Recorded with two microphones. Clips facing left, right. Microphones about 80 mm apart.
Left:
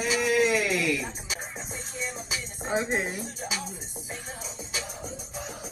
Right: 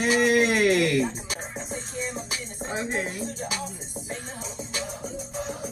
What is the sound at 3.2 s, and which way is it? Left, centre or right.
Music, centre.